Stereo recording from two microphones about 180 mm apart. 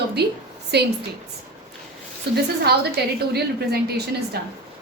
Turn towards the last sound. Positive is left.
turn(degrees=-60)  # may be behind; listen again after turning